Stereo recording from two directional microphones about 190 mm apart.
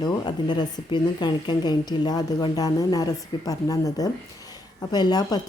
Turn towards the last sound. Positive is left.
turn(degrees=20)  # may be behind; listen again after turning